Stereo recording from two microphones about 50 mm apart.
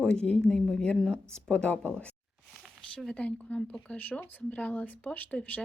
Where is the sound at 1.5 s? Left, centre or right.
Left.